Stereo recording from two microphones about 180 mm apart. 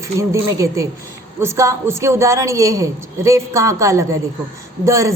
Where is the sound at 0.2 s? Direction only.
15° right (ahead or behind).